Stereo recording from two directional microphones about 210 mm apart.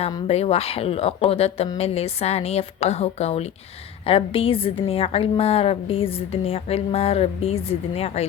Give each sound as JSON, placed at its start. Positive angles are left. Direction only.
{"t": 0.3, "sound": "a woman's voice", "side_deg": 30}